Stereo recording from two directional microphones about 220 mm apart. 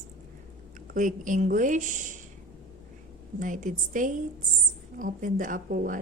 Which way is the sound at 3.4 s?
35° right (ahead or behind).